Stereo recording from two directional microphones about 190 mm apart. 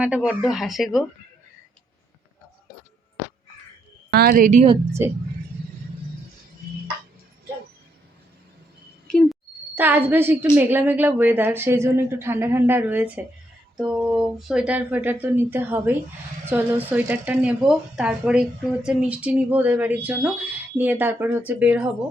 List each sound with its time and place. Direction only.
0.0 s speech: 5° right (ahead or behind)
4.1 s speech: 50° right (ahead or behind)
9.0 s a sound: centre (ahead or behind)
9.7 s speech: 10° right (ahead or behind)